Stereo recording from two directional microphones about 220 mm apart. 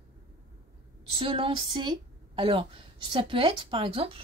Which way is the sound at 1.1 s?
25° right (ahead or behind).